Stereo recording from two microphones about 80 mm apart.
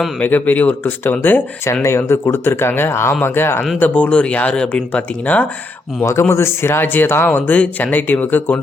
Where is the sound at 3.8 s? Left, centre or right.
Centre.